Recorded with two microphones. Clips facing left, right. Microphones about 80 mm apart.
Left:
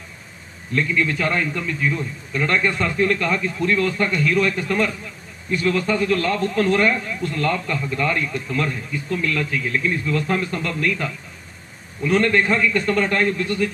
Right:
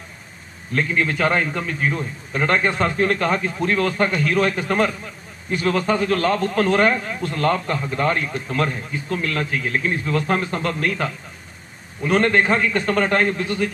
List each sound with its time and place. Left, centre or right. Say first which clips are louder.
0.8 s a man's voice: right 1 dB; right
7.2 s a man's voice: left 1 dB; right
7.4 s a man's voice: right 4 dB; right